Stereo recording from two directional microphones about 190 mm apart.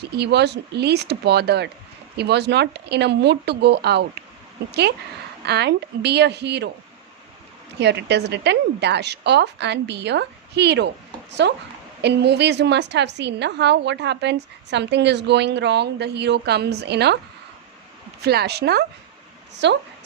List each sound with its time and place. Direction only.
0.1 s a woman's voice: 60° right (ahead or behind)
7.8 s a woman's voice: 60° right (ahead or behind)
18.2 s a woman's voice: 60° right (ahead or behind)